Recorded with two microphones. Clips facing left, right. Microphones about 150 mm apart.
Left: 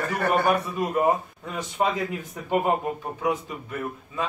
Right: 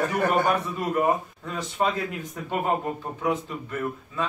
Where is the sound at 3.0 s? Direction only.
10° left (ahead or behind).